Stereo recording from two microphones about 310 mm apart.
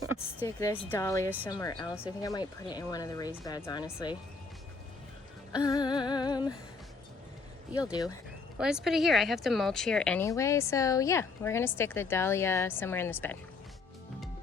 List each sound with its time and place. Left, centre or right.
0.2 s speech: centre
5.6 s speech: centre
8.5 s speech: centre